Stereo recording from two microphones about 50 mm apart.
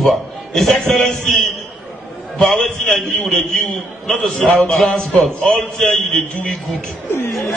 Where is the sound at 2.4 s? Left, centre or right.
Centre.